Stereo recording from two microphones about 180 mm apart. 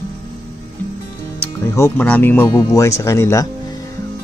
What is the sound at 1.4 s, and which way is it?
Speech, 10° left (ahead or behind).